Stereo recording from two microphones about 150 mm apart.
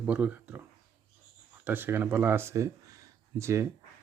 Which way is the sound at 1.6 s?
15° right (ahead or behind).